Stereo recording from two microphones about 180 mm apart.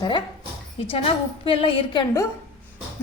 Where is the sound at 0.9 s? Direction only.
30° left (ahead or behind).